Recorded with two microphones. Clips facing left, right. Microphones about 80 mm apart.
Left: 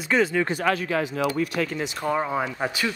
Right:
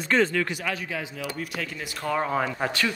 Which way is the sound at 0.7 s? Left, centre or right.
Left.